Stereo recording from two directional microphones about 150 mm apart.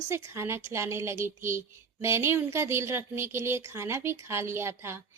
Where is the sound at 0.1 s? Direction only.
15° right (ahead or behind).